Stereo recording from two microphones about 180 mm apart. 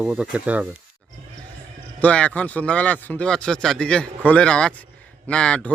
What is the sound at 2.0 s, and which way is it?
A man's voice, 5° left (ahead or behind).